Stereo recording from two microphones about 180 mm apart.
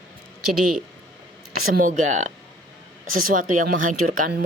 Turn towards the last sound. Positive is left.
turn(degrees=-50)  # may be behind; listen again after turning